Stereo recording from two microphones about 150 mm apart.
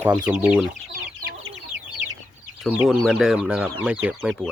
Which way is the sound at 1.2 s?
80° right.